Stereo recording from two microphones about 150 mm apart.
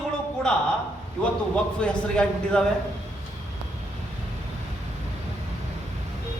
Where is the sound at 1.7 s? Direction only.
5° left (ahead or behind).